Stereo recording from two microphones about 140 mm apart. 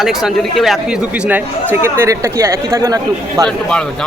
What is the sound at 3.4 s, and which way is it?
Speech, 5° left (ahead or behind).